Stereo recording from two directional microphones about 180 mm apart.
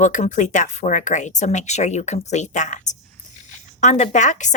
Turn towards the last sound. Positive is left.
turn(degrees=45)  # may be behind; listen again after turning